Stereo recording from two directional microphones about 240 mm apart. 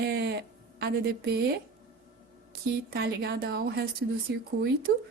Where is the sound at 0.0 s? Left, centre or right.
Right.